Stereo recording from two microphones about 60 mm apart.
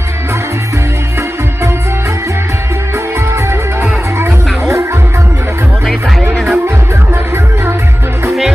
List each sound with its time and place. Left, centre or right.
4.2 s music: right
6.3 s music: centre